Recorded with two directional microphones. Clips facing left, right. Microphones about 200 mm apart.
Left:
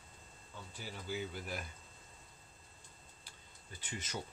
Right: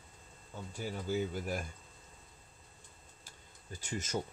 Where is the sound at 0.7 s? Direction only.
45° right (ahead or behind).